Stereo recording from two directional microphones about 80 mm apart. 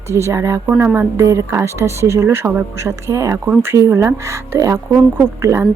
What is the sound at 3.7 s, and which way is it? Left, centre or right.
Speech, right.